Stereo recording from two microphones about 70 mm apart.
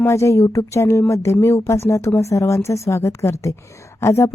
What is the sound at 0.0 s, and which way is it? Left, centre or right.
A woman's voice, left.